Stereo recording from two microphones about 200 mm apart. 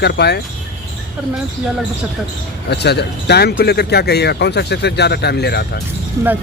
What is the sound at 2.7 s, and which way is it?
Speech, 55° left (ahead or behind).